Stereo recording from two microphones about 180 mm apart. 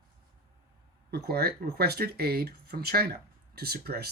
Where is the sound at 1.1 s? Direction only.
60° right (ahead or behind).